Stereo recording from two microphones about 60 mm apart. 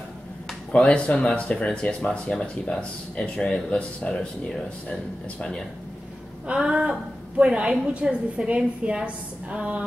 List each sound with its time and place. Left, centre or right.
0.7 s speech: centre
6.4 s a woman's voice: centre